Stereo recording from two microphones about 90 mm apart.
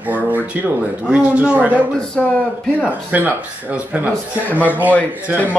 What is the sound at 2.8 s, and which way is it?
Speech, 15° right (ahead or behind).